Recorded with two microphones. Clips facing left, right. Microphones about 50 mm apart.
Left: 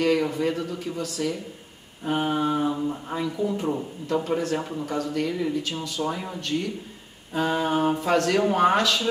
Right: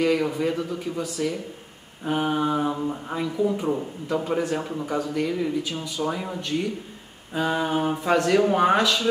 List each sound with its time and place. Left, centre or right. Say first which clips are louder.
0.0 s a man's voice: even; centre
2.0 s mantra: right 1 dB; centre
2.5 s a man's voice: even; centre
6.0 s a man's voice: right 1 dB; right
7.3 s mantra: even; centre
8.0 s a man's voice: right 1 dB; centre
8.3 s mantra: right 2 dB; centre
8.5 s a man's voice: right 1 dB; centre